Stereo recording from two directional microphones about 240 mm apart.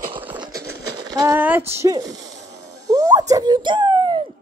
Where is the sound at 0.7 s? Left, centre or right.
Right.